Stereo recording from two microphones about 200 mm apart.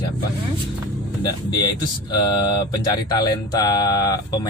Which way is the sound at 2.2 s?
20° left (ahead or behind).